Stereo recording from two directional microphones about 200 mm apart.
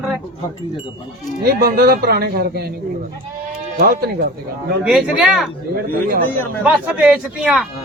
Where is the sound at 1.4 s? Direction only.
50° right (ahead or behind).